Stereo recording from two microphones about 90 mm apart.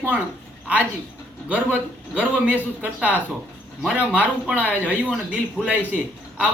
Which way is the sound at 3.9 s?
15° right (ahead or behind).